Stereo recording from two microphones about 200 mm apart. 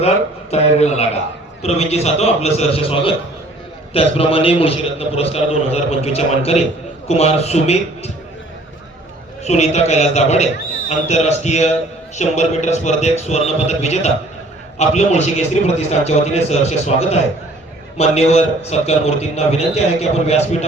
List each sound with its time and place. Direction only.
0.5 s a man's voice: 30° left (ahead or behind)
9.4 s a man's voice: 35° left (ahead or behind)